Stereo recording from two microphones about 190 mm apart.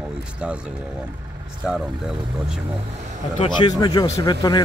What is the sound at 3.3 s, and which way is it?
A man's voice, 25° left (ahead or behind).